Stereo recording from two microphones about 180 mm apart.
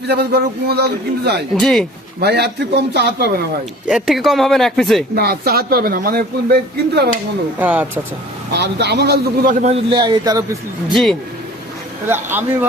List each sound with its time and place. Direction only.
0.1 s a man's voice: 60° right (ahead or behind)
1.5 s speech: centre (ahead or behind)
2.2 s a man's voice: 65° right (ahead or behind)
3.8 s speech: 5° right (ahead or behind)
5.1 s a man's voice: 60° right (ahead or behind)
7.6 s speech: 10° right (ahead or behind)
8.5 s a man's voice: 70° right (ahead or behind); by 10.4 s 25° right (ahead or behind)
10.9 s speech: centre (ahead or behind)
12.0 s speech: 10° right (ahead or behind)